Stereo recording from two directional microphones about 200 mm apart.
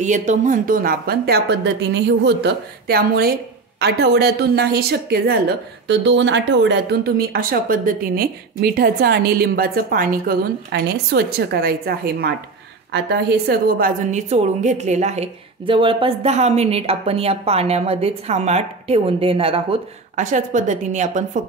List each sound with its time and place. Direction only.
0.0 s a woman's voice: 35° right (ahead or behind)